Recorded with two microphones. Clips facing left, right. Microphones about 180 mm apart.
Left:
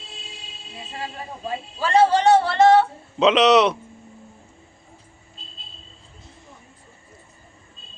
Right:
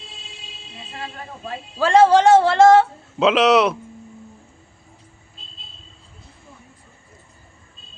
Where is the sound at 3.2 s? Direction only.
5° right (ahead or behind).